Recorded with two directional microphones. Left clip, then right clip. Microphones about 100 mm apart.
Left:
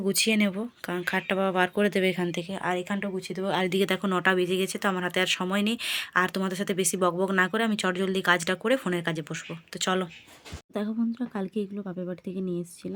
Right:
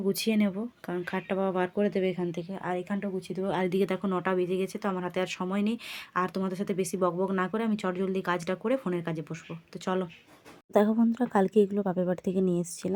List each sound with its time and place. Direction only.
0.0 s speech: 15° right (ahead or behind)
1.7 s speech: 5° left (ahead or behind)
3.2 s speech: 15° right (ahead or behind)
3.8 s speech: 5° right (ahead or behind)
10.7 s speech: 35° right (ahead or behind)